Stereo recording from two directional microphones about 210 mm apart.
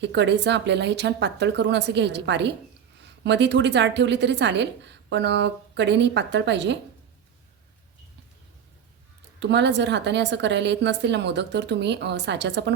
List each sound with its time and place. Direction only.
0.0 s a woman's voice: 55° right (ahead or behind)
9.4 s a woman's voice: 55° right (ahead or behind)